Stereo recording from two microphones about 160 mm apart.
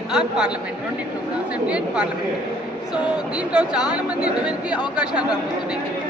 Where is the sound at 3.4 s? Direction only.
5° right (ahead or behind).